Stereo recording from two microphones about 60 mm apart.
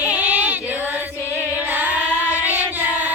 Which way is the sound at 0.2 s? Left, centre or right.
Right.